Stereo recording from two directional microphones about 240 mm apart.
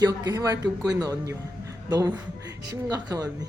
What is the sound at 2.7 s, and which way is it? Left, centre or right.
Speech, centre.